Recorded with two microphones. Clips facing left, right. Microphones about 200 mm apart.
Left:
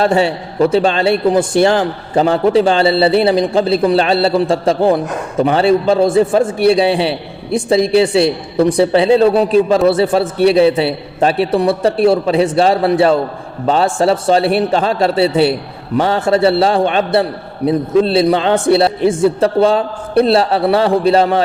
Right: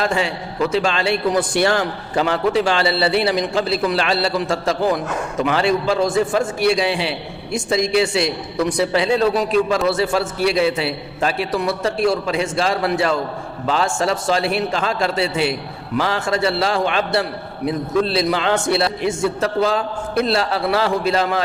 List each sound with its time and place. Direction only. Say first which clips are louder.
0.0 s a man's voice: left 7 dB; 35° left (ahead or behind)